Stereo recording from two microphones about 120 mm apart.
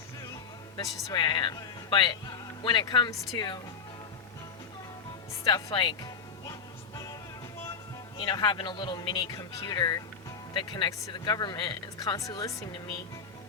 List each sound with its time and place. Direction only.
1.0 s speech: 40° left (ahead or behind)
5.5 s speech: 30° left (ahead or behind)
5.7 s music: 40° left (ahead or behind)
8.2 s speech: 40° left (ahead or behind)